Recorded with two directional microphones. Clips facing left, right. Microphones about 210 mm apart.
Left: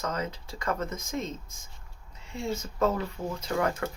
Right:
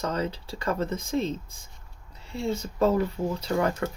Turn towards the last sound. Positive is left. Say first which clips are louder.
# right 3 dB
turn(degrees=-30)  # may be behind; listen again after turning